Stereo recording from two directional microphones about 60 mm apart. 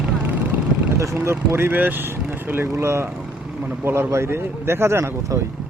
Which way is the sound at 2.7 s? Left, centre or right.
Right.